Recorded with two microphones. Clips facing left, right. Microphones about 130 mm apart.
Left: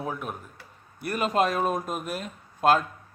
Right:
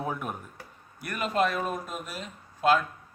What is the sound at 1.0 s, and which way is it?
Speech, 40° left (ahead or behind).